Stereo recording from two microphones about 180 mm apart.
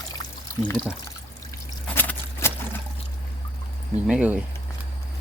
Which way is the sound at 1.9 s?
10° left (ahead or behind).